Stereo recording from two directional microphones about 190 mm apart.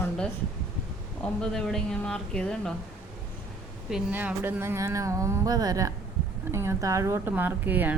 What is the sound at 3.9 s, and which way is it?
Speech, 10° right (ahead or behind).